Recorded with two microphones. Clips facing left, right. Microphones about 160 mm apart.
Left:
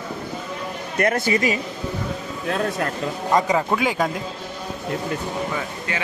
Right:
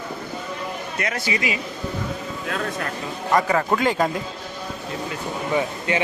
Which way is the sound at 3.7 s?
5° left (ahead or behind).